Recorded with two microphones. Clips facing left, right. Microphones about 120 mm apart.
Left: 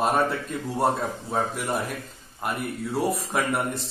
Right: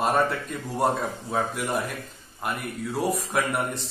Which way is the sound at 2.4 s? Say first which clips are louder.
Left 1 dB; centre (ahead or behind).